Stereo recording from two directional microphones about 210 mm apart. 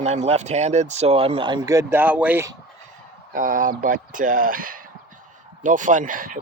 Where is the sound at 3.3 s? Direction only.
40° right (ahead or behind).